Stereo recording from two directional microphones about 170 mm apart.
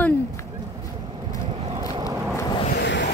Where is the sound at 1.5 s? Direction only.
35° right (ahead or behind).